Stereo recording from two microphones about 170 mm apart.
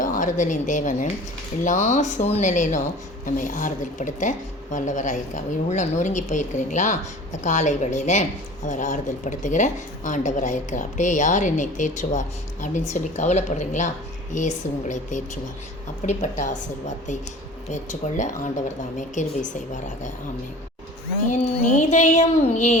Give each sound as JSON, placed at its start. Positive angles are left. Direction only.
{"t": 0.0, "sound": "a woman's voice", "side_deg": 50}
{"t": 21.2, "sound": "a woman's voice", "side_deg": 50}